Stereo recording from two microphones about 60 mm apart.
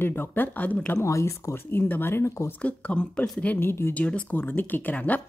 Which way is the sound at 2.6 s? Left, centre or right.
Left.